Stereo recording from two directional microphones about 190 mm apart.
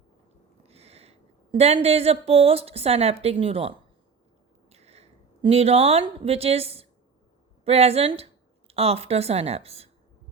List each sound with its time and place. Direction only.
0.7 s a woman's voice: 35° right (ahead or behind)